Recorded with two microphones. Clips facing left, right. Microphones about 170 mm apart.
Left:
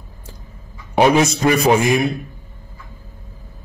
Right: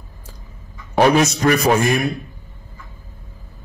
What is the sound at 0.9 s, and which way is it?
A man's voice, 20° left (ahead or behind).